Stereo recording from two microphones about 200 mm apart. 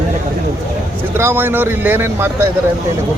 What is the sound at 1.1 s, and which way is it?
Speech, 10° right (ahead or behind).